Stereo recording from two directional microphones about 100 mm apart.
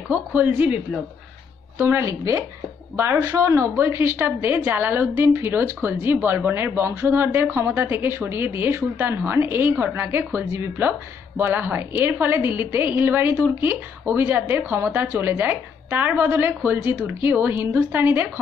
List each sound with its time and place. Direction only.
0.1 s speech: 15° right (ahead or behind)
1.8 s a woman's voice: 25° right (ahead or behind)